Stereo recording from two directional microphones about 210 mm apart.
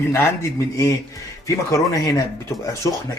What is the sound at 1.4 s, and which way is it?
Speech, 15° left (ahead or behind).